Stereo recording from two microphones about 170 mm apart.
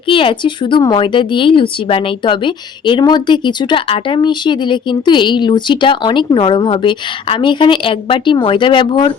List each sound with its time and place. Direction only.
0.1 s speech: 30° left (ahead or behind)